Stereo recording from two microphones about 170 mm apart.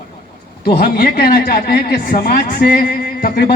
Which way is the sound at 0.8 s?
60° left (ahead or behind).